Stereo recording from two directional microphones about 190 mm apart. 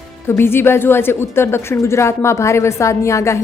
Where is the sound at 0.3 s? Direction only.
10° left (ahead or behind).